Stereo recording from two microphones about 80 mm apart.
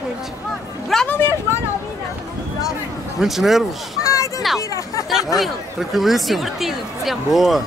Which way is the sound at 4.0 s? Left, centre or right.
Left.